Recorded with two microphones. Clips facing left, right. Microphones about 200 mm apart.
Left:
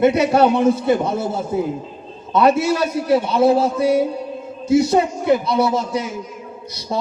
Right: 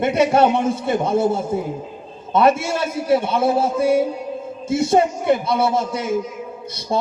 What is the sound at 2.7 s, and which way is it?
Music, 25° right (ahead or behind).